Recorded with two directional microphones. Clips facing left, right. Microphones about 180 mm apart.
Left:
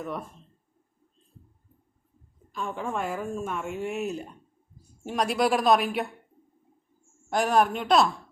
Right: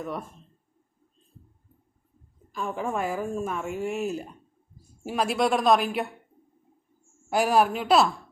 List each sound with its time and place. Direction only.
0.0 s a woman's voice: centre (ahead or behind)
2.5 s a woman's voice: 5° right (ahead or behind)
7.3 s a woman's voice: 5° right (ahead or behind)